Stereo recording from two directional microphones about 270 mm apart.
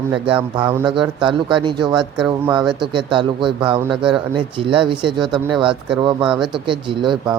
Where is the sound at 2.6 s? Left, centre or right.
Centre.